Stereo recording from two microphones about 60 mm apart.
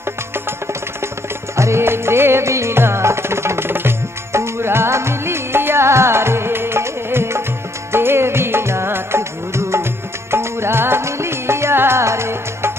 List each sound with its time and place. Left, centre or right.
1.6 s music: right